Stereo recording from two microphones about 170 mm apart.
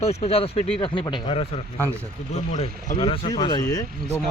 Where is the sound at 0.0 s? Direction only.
40° left (ahead or behind).